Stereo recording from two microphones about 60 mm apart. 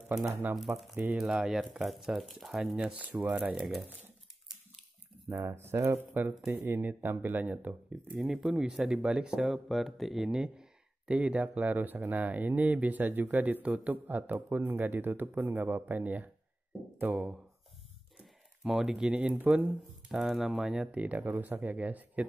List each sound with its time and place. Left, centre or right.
0.3 s speech: right
0.6 s speech: centre
2.8 s speech: right
5.4 s speech: right
8.2 s speech: centre
10.2 s speech: centre; by 17.2 s right
18.8 s speech: centre
19.3 s speech: right
20.1 s speech: centre
20.9 s speech: right